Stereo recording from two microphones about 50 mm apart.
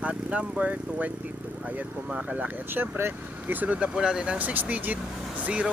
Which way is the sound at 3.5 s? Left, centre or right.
Right.